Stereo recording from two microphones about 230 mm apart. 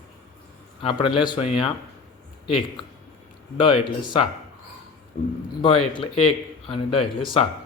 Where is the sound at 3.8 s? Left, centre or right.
Left.